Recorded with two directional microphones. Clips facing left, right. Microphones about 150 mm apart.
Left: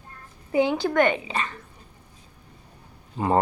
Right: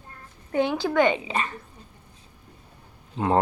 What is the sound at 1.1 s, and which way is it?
Speech, 30° right (ahead or behind).